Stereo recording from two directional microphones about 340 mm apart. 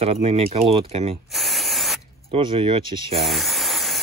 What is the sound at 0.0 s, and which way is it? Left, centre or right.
Speech, centre.